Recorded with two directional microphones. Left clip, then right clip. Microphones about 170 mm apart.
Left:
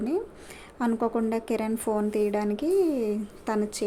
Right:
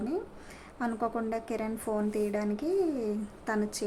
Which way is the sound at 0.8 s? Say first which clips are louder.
Left 5 dB; 25° left (ahead or behind).